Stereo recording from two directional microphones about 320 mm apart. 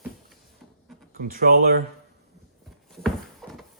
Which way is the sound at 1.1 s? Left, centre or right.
Right.